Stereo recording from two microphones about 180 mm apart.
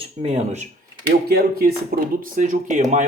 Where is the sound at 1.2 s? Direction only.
60° right (ahead or behind).